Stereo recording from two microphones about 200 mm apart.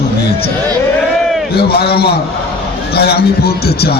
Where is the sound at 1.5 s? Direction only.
50° left (ahead or behind).